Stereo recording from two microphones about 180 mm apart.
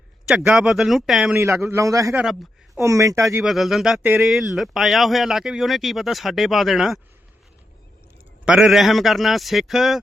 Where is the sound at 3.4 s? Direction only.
Centre (ahead or behind).